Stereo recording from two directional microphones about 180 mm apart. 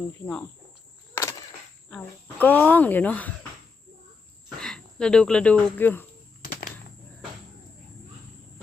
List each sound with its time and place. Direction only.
1.1 s a sound: 15° left (ahead or behind)
1.9 s speech: 10° left (ahead or behind)
4.6 s speech: 5° left (ahead or behind)